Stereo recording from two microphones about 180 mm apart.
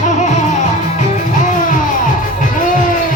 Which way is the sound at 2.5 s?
45° left (ahead or behind).